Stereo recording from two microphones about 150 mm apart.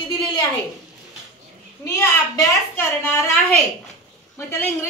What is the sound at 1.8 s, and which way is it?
A woman's voice, 20° left (ahead or behind).